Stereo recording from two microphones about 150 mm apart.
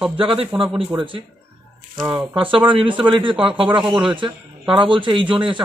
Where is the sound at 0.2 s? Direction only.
35° right (ahead or behind).